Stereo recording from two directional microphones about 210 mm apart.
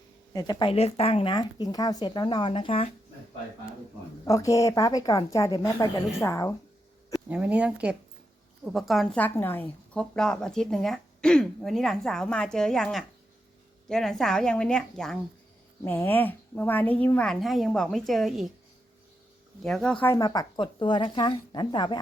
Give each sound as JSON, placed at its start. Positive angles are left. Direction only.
{"t": 0.3, "sound": "speech", "side_deg": 20}
{"t": 4.3, "sound": "a woman's voice", "side_deg": 15}
{"t": 7.1, "sound": "a woman's voice", "side_deg": -5}
{"t": 19.6, "sound": "speech", "side_deg": 5}